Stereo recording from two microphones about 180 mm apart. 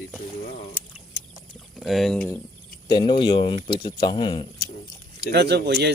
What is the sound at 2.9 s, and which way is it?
Speech, 25° left (ahead or behind).